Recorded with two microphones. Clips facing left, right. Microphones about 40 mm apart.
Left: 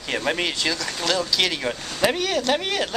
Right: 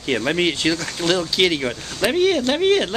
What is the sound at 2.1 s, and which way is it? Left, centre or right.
Speech, right.